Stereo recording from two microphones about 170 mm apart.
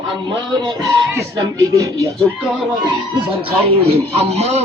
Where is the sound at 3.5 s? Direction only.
35° right (ahead or behind).